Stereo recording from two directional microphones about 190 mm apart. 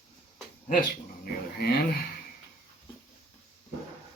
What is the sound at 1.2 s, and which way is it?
Speech, 55° left (ahead or behind).